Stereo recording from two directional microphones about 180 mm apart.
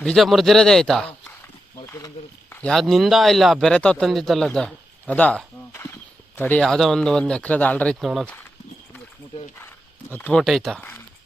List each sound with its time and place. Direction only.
0.0 s a man's voice: centre (ahead or behind)
1.7 s a sound: 20° left (ahead or behind)
2.5 s a man's voice: 5° left (ahead or behind)
10.1 s speech: 10° left (ahead or behind)